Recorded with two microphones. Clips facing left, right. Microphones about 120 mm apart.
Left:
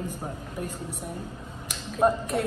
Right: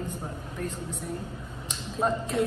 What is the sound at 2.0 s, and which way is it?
Speech, 10° left (ahead or behind).